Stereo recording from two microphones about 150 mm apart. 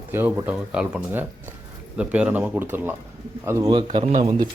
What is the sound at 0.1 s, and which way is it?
Speech, 15° right (ahead or behind).